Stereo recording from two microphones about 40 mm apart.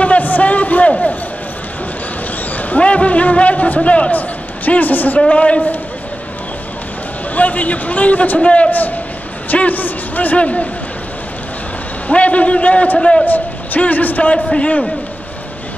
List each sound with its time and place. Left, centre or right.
0.0 s a sound: left
2.8 s a man's voice: left
5.3 s a man's voice: left
7.3 s a man's voice: left
8.4 s a man's voice: left
8.6 s a man's voice: left
10.3 s a man's voice: left
12.1 s a man's voice: left
13.2 s a man's voice: left
14.6 s a man's voice: left